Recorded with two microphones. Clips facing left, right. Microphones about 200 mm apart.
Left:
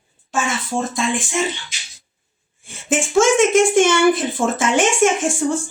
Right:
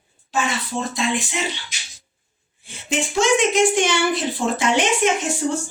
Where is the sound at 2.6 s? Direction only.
50° left (ahead or behind).